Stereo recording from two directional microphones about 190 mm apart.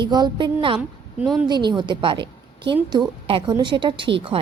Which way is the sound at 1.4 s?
25° right (ahead or behind).